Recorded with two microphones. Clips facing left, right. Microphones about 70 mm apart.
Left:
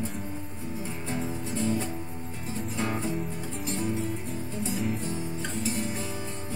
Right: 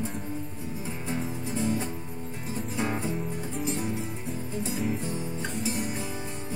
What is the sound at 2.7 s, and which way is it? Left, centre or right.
Music, centre.